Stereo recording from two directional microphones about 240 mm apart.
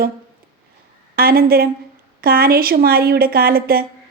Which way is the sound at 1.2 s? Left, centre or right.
Right.